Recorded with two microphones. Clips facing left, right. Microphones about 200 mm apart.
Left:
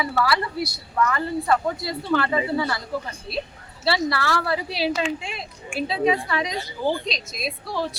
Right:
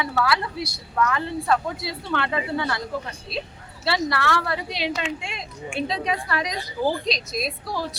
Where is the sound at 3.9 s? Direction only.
Centre (ahead or behind).